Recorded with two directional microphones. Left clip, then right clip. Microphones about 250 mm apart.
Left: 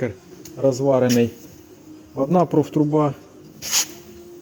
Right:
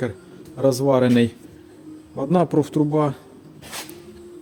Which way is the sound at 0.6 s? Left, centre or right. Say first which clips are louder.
Even; centre.